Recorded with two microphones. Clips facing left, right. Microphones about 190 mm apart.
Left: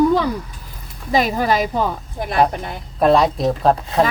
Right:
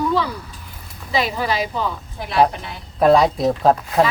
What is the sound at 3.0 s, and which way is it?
Speech, centre (ahead or behind).